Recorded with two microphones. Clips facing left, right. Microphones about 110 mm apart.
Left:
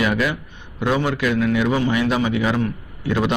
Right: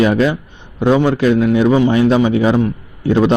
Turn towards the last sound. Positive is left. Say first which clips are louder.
# right 8 dB
turn(degrees=-30)  # may be behind; listen again after turning